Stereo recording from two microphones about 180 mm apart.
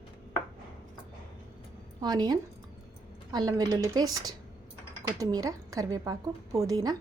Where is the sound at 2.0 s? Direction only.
20° right (ahead or behind).